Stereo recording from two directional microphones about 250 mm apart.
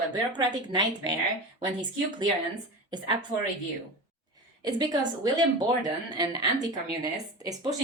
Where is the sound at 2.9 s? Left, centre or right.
Centre.